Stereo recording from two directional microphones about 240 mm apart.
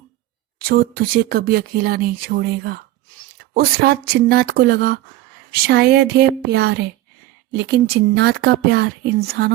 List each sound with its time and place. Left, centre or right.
0.7 s speech: right